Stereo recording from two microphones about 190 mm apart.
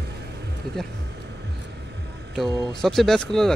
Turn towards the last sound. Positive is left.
turn(degrees=0)  # may be behind; listen again after turning